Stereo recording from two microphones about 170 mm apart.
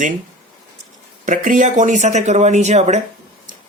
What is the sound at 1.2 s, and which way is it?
Speech, 50° right (ahead or behind).